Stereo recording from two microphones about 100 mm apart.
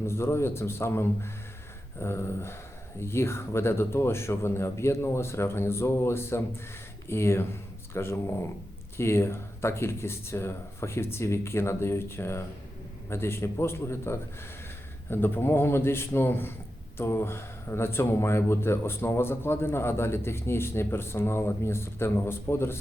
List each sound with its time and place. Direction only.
0.0 s speech: 25° left (ahead or behind)